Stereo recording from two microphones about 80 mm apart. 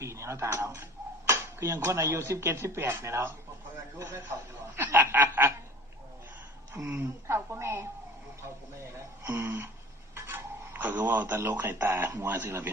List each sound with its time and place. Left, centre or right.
0.0 s speech: right
4.8 s snicker: right
6.9 s speech: right